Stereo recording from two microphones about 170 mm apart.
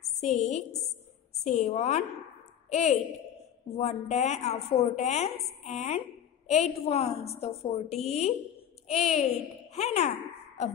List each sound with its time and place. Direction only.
0.2 s a woman's voice: 40° left (ahead or behind)